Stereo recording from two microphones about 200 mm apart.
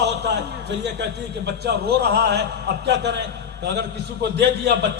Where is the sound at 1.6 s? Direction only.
55° right (ahead or behind).